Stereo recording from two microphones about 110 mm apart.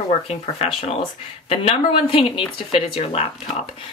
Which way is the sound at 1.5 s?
60° left (ahead or behind).